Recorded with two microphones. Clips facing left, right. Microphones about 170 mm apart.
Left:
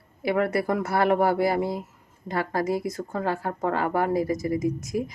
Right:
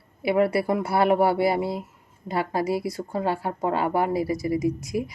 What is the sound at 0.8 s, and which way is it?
Speech, 30° right (ahead or behind).